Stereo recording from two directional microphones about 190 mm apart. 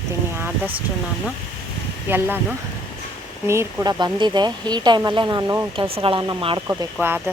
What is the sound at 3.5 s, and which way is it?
Speech, 15° right (ahead or behind).